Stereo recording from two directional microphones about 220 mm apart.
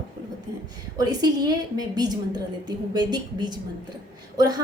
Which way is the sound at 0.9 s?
15° right (ahead or behind).